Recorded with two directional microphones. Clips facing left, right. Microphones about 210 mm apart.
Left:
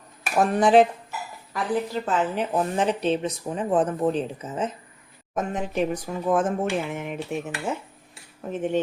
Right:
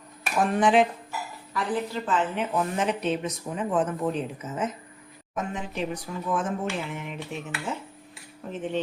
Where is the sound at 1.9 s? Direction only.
40° left (ahead or behind).